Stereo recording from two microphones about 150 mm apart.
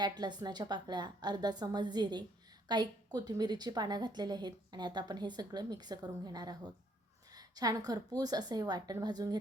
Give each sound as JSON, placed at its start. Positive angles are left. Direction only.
{"t": 0.0, "sound": "a woman's voice", "side_deg": -30}
{"t": 7.3, "sound": "a sound", "side_deg": -25}
{"t": 7.9, "sound": "a woman's voice", "side_deg": -25}